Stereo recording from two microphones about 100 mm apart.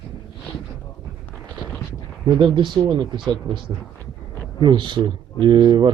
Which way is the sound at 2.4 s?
55° right (ahead or behind).